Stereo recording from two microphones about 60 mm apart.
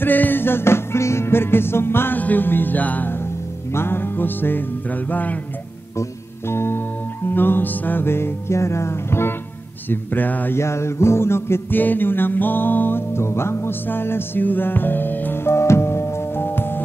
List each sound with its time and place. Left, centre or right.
0.0 s music: left
3.7 s music: left
6.5 s music: left
9.8 s music: left
10.5 s music: left
11.8 s music: left
15.5 s music: left